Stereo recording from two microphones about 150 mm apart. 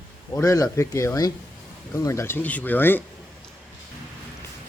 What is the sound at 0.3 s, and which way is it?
Speech, 25° left (ahead or behind).